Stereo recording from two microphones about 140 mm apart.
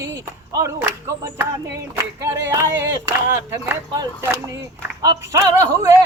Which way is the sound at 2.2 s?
20° right (ahead or behind).